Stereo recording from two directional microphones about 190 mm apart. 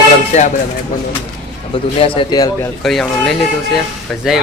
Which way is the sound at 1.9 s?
30° left (ahead or behind).